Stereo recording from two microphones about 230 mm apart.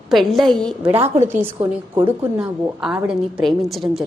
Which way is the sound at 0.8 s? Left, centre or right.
Right.